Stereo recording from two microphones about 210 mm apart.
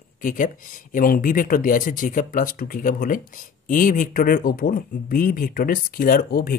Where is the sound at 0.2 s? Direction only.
40° left (ahead or behind).